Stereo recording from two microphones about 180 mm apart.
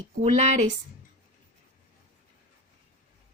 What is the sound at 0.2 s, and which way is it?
Speech, 40° right (ahead or behind).